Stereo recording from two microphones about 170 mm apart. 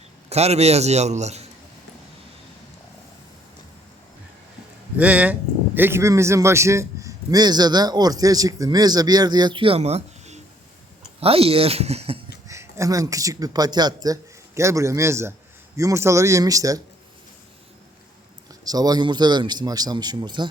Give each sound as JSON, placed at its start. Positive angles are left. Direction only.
{"t": 0.3, "sound": "a man's voice", "side_deg": -40}
{"t": 4.9, "sound": "a man's voice", "side_deg": -10}
{"t": 12.5, "sound": "a man's voice", "side_deg": -15}
{"t": 18.6, "sound": "a man's voice", "side_deg": -20}